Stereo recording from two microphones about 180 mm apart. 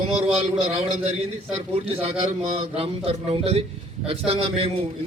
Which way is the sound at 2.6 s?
35° right (ahead or behind).